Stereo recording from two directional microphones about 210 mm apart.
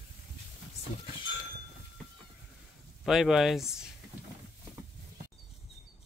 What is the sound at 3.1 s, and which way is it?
Speech, centre (ahead or behind).